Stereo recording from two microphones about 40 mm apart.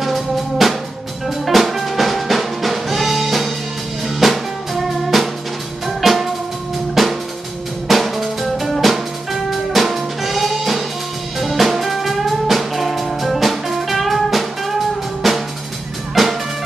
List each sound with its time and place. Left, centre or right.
0.0 s drum: centre
1.2 s music: centre
7.0 s drum: centre
7.9 s music: centre
15.2 s drum kit: centre
16.2 s music: centre